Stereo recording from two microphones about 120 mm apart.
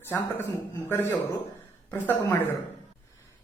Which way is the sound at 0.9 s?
20° left (ahead or behind).